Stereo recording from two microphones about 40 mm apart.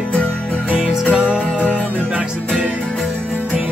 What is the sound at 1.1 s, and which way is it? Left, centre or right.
Music, right.